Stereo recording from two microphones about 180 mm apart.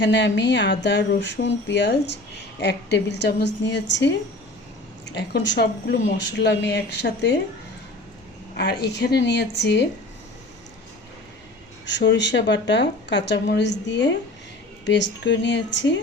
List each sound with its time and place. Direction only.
0.0 s speech: 80° left
8.8 s speech: 65° left (ahead or behind)
11.9 s speech: 80° left